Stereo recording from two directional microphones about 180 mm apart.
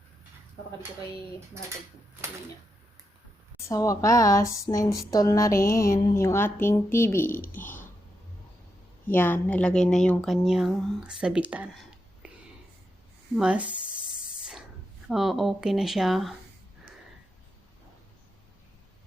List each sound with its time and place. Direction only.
3.7 s speech: 20° left (ahead or behind)
7.3 s speech: 50° left (ahead or behind)
9.0 s a woman's voice: 10° left (ahead or behind); by 12.3 s 5° right (ahead or behind)
13.3 s a woman's voice: 5° right (ahead or behind)
15.0 s a woman's voice: centre (ahead or behind)